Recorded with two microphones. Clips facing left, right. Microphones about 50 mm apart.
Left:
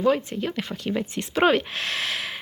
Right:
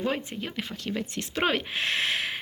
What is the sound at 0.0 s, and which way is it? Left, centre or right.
Speech, right.